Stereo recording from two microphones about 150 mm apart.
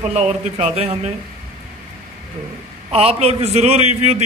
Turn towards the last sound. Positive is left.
turn(degrees=-45)  # may be behind; listen again after turning